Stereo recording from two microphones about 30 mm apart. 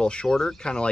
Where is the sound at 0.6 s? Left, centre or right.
Left.